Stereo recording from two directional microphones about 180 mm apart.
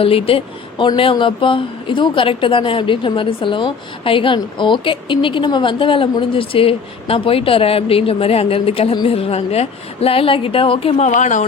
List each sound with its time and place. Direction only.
0.0 s speech: 30° left (ahead or behind)